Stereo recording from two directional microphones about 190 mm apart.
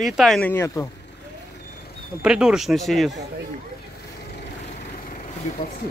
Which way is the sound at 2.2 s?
5° right (ahead or behind).